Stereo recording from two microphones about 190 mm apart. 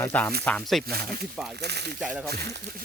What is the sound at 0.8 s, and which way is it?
Speech, 55° right (ahead or behind).